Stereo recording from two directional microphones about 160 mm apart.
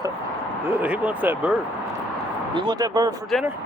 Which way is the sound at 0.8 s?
10° right (ahead or behind).